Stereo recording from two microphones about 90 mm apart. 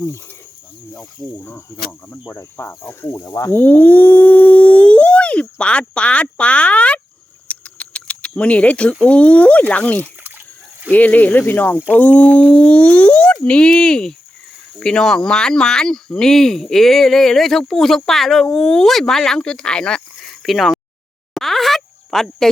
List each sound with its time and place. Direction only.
1.7 s speech: 30° left (ahead or behind)
2.2 s cricket: 30° left (ahead or behind)
3.2 s speech: 40° left (ahead or behind)
3.5 s a sound: 20° left (ahead or behind)
7.4 s speech: 15° left (ahead or behind)
21.3 s insect: centre (ahead or behind)